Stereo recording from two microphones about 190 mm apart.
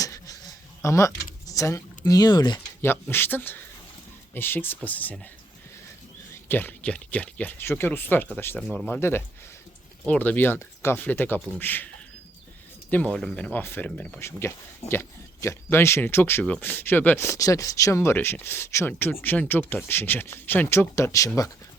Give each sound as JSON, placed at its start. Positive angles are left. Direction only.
{"t": 0.0, "sound": "a sound", "side_deg": 20}
{"t": 0.8, "sound": "speech", "side_deg": 15}
{"t": 2.8, "sound": "speech", "side_deg": 10}
{"t": 6.5, "sound": "speech", "side_deg": 10}
{"t": 12.9, "sound": "speech", "side_deg": 5}